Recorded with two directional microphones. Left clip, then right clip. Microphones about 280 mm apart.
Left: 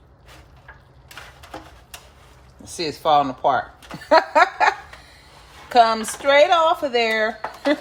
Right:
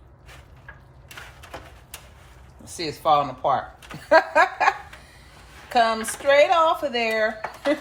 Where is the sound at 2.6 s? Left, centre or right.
Left.